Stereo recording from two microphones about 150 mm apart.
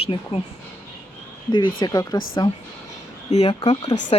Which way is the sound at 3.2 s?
50° left (ahead or behind).